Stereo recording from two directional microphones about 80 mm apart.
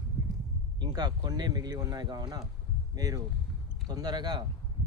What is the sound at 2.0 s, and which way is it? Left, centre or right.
Speech, right.